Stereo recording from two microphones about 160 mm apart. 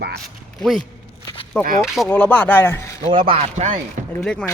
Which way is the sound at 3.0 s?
35° right (ahead or behind).